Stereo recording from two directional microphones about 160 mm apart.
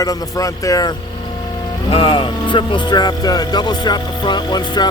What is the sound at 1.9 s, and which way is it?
Speech, 35° left (ahead or behind).